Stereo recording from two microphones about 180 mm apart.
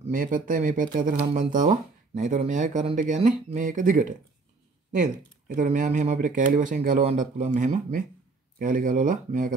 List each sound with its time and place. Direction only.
0.0 s speech: 50° right (ahead or behind)